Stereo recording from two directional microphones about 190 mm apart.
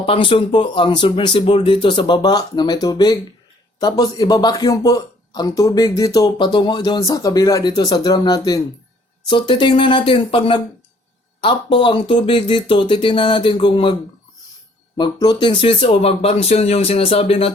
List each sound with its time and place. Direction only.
0.0 s speech: 30° left (ahead or behind)
14.9 s speech: 20° left (ahead or behind)